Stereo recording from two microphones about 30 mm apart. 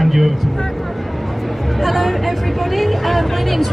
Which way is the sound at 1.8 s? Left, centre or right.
Centre.